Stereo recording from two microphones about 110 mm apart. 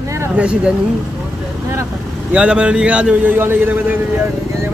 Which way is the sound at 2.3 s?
10° right (ahead or behind).